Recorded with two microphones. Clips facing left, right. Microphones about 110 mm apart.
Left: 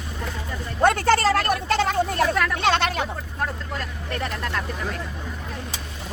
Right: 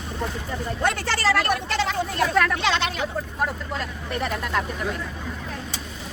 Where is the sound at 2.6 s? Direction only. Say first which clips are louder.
Left 3 dB; 50° left (ahead or behind).